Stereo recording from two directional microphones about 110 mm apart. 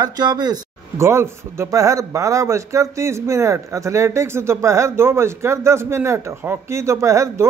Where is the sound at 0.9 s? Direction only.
25° right (ahead or behind).